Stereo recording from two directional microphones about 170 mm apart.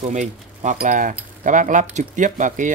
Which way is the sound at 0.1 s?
45° right (ahead or behind).